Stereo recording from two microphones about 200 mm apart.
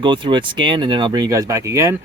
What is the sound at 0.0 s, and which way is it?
Speech, 25° right (ahead or behind).